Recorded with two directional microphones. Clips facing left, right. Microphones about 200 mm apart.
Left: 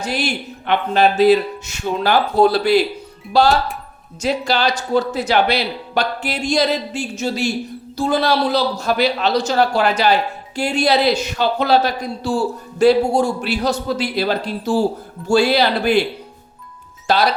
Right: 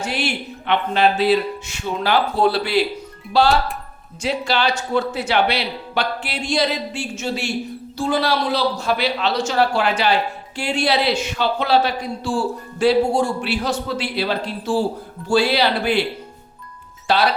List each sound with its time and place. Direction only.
0.0 s a woman's voice: 40° left (ahead or behind)
17.1 s speech: 45° left (ahead or behind)